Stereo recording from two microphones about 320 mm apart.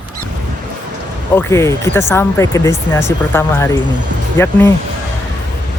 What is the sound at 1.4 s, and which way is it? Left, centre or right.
Speech, centre.